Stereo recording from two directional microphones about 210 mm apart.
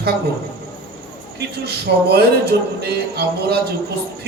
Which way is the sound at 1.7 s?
50° right (ahead or behind).